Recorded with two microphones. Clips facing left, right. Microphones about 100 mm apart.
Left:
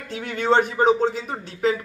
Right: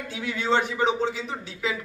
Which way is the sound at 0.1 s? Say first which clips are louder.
Left 5 dB; 50° left (ahead or behind).